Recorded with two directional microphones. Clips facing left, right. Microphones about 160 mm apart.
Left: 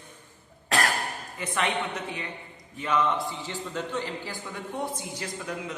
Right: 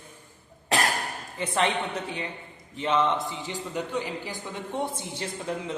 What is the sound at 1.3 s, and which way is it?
A man's voice, 30° right (ahead or behind).